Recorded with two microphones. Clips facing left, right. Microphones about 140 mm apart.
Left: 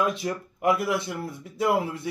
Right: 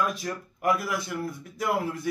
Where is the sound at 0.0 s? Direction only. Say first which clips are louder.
Left 3 dB; 20° left (ahead or behind).